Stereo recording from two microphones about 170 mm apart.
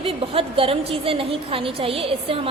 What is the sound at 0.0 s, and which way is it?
A woman's voice, 35° right (ahead or behind).